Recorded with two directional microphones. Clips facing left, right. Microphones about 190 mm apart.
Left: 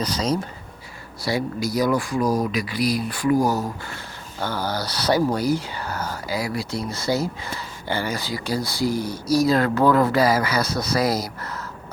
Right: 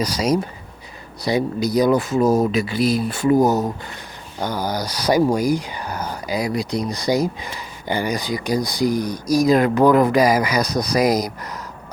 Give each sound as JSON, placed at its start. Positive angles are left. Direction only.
{"t": 0.0, "sound": "speech", "side_deg": -10}